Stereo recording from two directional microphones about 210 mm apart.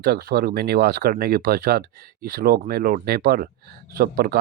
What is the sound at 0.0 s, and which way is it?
Speech, 45° right (ahead or behind).